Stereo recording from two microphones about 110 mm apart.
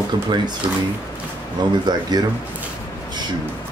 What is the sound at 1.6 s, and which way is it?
Speech, 40° right (ahead or behind).